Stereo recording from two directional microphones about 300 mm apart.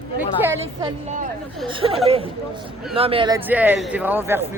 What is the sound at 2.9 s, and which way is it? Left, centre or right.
A man's voice, centre.